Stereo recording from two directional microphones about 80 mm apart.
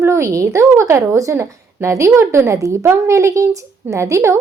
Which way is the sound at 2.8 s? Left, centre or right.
Right.